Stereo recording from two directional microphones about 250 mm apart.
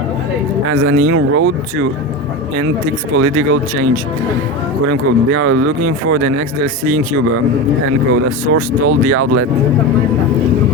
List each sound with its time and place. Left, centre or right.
0.7 s speech: right
3.2 s speech: right
4.9 s speech: right
7.9 s speech: right